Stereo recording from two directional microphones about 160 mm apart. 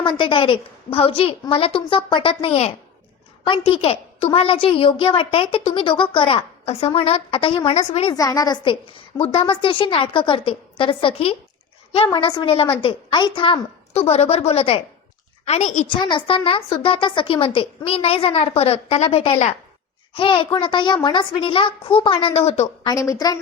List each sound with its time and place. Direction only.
0.0 s a woman's voice: 30° left (ahead or behind)
8.1 s a woman's voice: 20° left (ahead or behind); by 15.9 s 45° left (ahead or behind)
15.9 s a woman's voice: 30° left (ahead or behind)
22.9 s a woman's voice: 20° left (ahead or behind)